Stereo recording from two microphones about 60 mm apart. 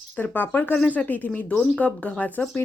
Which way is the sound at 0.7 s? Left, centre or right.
Left.